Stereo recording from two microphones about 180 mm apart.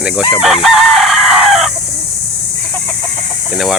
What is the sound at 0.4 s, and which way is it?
Chicken, centre (ahead or behind).